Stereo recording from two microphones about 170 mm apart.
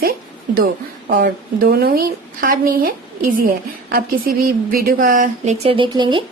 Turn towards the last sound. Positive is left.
turn(degrees=-25)  # may be behind; listen again after turning